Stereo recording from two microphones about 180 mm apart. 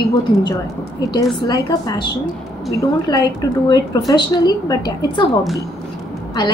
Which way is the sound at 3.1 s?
20° left (ahead or behind).